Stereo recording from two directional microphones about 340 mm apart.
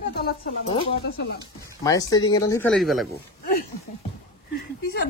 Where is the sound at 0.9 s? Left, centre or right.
Left.